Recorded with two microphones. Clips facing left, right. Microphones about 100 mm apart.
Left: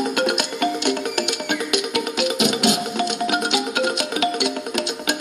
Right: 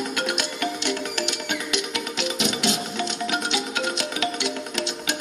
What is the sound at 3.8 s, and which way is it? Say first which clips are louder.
Music: left 5 dB; 55° left (ahead or behind).